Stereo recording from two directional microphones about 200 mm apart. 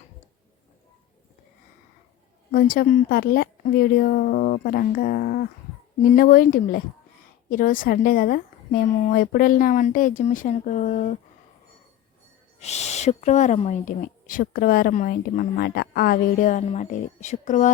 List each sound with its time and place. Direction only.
2.5 s a woman's voice: 45° left (ahead or behind)
12.5 s speech: 35° left (ahead or behind)